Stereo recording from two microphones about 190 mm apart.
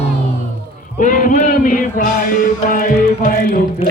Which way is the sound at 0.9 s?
45° left (ahead or behind).